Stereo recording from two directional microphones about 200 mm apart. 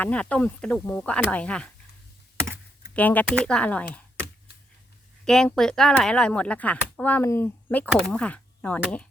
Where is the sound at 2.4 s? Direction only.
15° right (ahead or behind).